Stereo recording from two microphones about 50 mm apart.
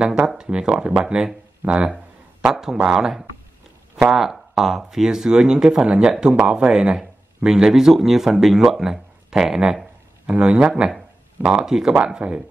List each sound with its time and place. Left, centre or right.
0.4 s speech: centre
10.2 s speech: right
10.7 s speech: centre
11.9 s speech: right